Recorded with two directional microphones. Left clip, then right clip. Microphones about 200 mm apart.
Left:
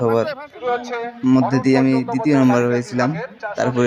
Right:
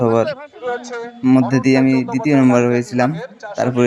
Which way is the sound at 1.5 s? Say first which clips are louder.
Right 2 dB; 10° right (ahead or behind).